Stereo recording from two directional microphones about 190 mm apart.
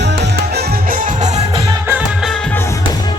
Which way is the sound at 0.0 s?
65° right (ahead or behind).